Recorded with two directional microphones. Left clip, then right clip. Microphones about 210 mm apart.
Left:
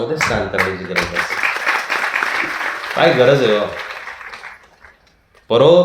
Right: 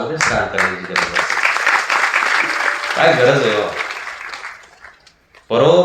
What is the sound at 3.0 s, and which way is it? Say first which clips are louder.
Speech: right 1 dB; 35° left (ahead or behind).